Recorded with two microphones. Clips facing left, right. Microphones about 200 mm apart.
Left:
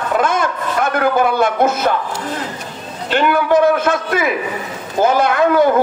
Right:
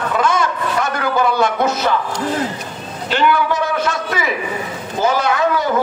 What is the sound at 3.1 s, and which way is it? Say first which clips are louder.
A man's voice: left 4 dB; 55° left (ahead or behind).